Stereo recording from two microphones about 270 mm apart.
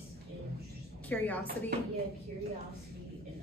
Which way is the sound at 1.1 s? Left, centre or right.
Centre.